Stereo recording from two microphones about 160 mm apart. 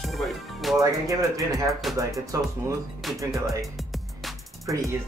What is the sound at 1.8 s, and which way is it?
Speech, centre (ahead or behind).